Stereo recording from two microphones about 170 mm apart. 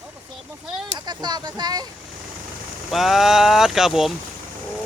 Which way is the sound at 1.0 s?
25° right (ahead or behind).